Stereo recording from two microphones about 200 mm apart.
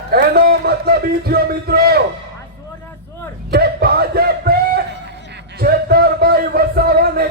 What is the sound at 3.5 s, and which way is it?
Music, 55° right (ahead or behind).